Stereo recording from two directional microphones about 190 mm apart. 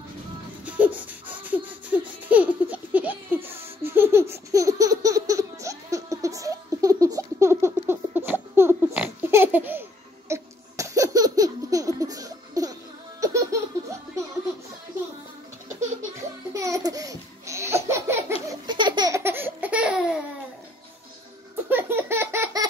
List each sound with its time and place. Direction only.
0.7 s a sound: 10° right (ahead or behind)
12.0 s laughter: 20° right (ahead or behind)
16.5 s laughter: 15° right (ahead or behind)
18.5 s laughter: 25° right (ahead or behind); by 20.2 s 5° right (ahead or behind)
21.6 s laughter: 10° right (ahead or behind)